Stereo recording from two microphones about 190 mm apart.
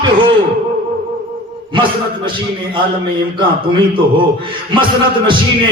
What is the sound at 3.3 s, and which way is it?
A man's voice, 25° right (ahead or behind).